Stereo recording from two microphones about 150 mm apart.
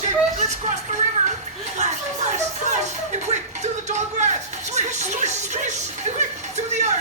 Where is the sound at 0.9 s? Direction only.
55° right (ahead or behind).